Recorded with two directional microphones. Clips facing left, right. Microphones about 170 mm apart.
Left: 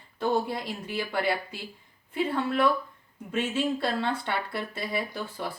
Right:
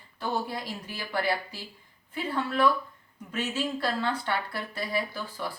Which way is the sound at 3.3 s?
25° left (ahead or behind).